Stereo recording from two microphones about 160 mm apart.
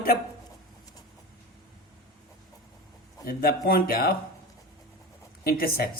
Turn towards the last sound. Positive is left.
turn(degrees=70)  # may be behind; listen again after turning